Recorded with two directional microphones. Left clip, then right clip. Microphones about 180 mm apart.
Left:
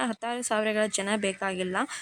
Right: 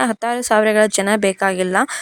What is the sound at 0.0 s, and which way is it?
Speech, 50° right (ahead or behind).